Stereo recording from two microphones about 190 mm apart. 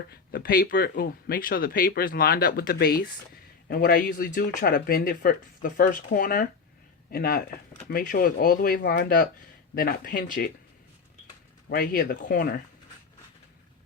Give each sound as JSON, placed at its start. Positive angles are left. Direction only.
{"t": 0.1, "sound": "speech", "side_deg": 55}
{"t": 11.7, "sound": "speech", "side_deg": 50}